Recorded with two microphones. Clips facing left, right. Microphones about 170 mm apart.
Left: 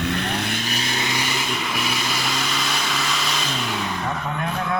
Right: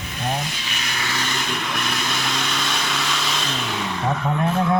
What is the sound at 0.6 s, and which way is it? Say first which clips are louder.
Vehicle: left 4 dB; 30° left (ahead or behind).